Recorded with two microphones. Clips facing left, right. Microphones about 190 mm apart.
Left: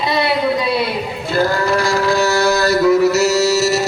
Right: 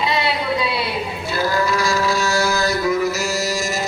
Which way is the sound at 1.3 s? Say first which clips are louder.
Left 4 dB; 55° left (ahead or behind).